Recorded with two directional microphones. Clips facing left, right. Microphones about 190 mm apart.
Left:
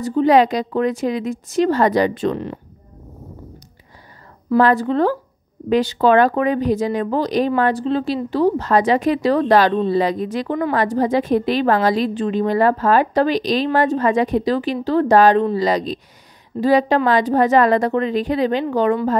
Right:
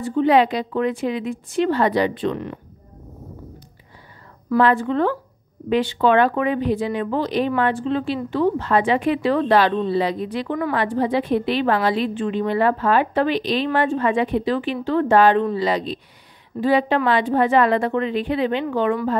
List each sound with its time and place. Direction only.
0.0 s a woman's voice: 40° left (ahead or behind)
4.6 s a woman's voice: 40° left (ahead or behind)